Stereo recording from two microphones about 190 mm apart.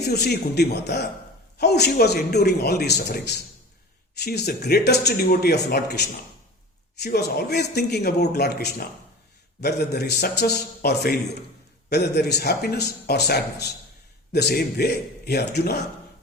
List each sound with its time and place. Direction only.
0.0 s speech: 60° left (ahead or behind)